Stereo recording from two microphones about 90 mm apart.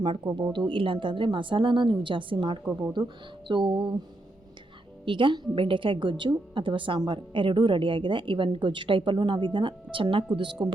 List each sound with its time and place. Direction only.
0.0 s a woman's voice: 55° right (ahead or behind)
5.0 s a woman's voice: 65° right (ahead or behind)
10.3 s speech: 65° right (ahead or behind)